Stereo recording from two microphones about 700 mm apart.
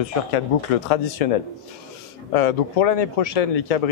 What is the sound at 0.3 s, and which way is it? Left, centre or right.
Speech, left.